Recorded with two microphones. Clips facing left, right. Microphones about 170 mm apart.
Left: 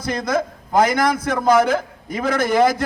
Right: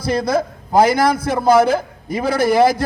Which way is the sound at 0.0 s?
35° right (ahead or behind).